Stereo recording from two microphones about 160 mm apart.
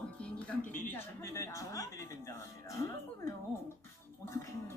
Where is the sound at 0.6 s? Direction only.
55° left (ahead or behind).